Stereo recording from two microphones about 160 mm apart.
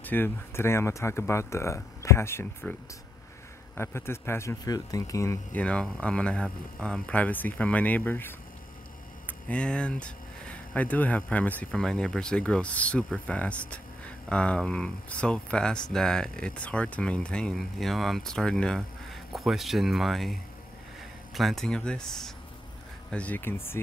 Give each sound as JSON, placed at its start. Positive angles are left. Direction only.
{"t": 0.0, "sound": "speech", "side_deg": 10}
{"t": 3.7, "sound": "speech", "side_deg": 15}
{"t": 9.5, "sound": "speech", "side_deg": 5}